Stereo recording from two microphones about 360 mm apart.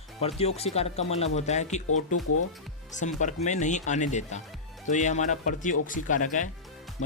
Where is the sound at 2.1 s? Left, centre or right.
Left.